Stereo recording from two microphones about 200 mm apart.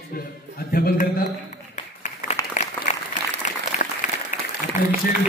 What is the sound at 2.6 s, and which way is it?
Applause, 40° left (ahead or behind).